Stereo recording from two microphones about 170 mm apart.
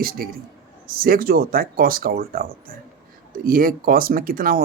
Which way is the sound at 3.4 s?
55° right (ahead or behind).